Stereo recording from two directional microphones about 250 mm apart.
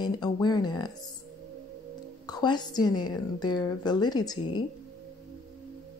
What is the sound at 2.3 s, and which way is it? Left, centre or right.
A woman's voice, centre.